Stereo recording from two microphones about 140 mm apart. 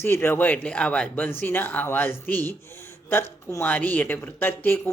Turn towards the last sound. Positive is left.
turn(degrees=15)  # may be behind; listen again after turning